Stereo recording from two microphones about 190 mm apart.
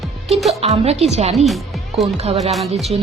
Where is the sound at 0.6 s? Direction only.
35° right (ahead or behind).